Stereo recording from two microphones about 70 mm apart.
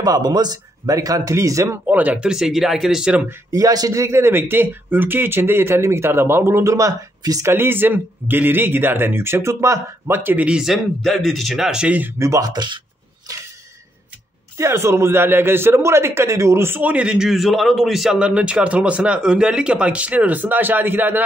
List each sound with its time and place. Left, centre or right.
0.0 s speech: right
1.9 s speech: right
2.2 s a man's voice: centre
3.5 s a man's voice: right
7.4 s a man's voice: right
10.4 s a man's voice: centre
11.0 s speech: centre
12.2 s speech: right
14.6 s a man's voice: right
16.9 s a man's voice: centre; by 21.2 s right